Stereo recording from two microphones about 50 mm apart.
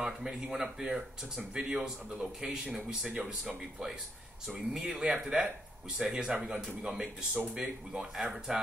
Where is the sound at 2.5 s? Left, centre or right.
Centre.